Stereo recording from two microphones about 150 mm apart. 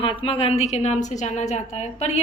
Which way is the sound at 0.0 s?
35° left (ahead or behind).